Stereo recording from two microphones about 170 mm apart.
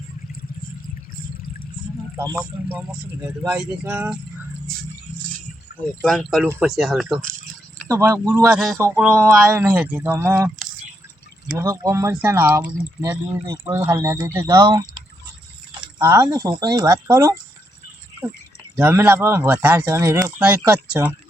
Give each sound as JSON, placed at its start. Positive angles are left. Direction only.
{"t": 3.2, "sound": "speech", "side_deg": -10}
{"t": 5.9, "sound": "speech", "side_deg": 0}
{"t": 7.9, "sound": "speech", "side_deg": -20}
{"t": 8.4, "sound": "speech", "side_deg": 0}
{"t": 11.5, "sound": "speech", "side_deg": -20}
{"t": 16.0, "sound": "speech", "side_deg": -15}
{"t": 18.8, "sound": "speech", "side_deg": -10}